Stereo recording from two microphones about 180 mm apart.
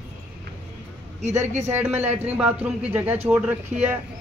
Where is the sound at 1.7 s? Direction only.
10° right (ahead or behind).